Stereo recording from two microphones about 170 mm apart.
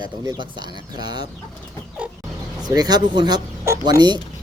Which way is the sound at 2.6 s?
25° right (ahead or behind).